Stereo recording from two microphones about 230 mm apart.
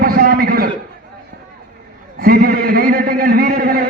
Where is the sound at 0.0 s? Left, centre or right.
Right.